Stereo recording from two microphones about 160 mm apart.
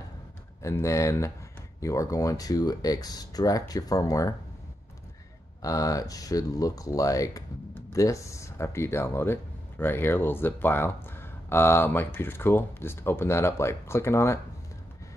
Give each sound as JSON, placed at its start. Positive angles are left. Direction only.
{"t": 0.6, "sound": "speech", "side_deg": 20}
{"t": 5.6, "sound": "speech", "side_deg": 20}